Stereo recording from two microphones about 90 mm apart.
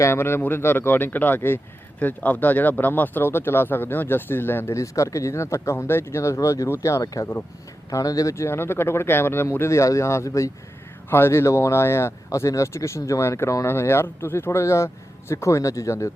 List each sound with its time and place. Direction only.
0.0 s speech: 30° left (ahead or behind)